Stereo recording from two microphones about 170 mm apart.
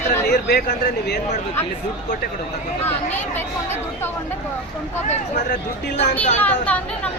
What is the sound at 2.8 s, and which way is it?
Speech, 15° left (ahead or behind).